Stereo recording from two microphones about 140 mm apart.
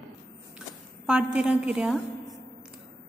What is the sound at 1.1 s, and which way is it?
Speech, 5° right (ahead or behind).